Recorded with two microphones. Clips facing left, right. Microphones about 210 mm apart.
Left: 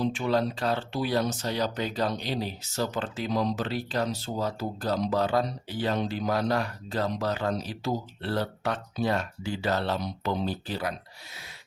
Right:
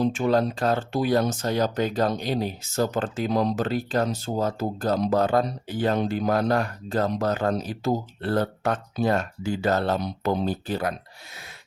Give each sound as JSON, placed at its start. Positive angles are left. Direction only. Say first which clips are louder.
{"t": 0.0, "sound": "speech", "louder": "right 4 dB", "side_deg": -45}